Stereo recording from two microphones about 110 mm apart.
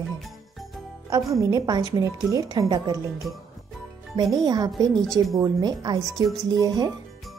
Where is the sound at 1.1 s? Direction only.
30° right (ahead or behind).